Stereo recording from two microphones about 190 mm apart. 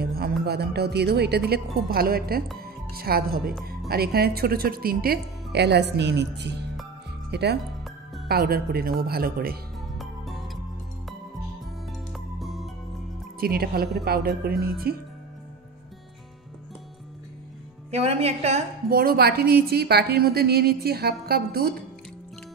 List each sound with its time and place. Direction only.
0.0 s a woman's voice: 55° right (ahead or behind)
9.9 s music: centre (ahead or behind)
12.1 s music: centre (ahead or behind)
13.4 s speech: 50° right (ahead or behind)
17.9 s speech: 35° right (ahead or behind)
18.9 s a woman's voice: 50° right (ahead or behind)